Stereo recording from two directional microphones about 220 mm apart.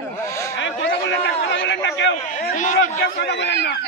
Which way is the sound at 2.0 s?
60° left (ahead or behind).